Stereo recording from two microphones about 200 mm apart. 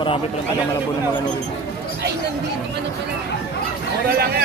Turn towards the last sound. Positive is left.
turn(degrees=-50)  # may be behind; listen again after turning